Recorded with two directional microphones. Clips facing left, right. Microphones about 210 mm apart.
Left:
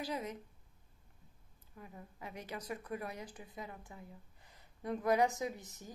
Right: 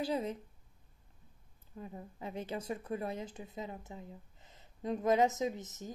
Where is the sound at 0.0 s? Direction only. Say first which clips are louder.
Right 5 dB; 30° right (ahead or behind).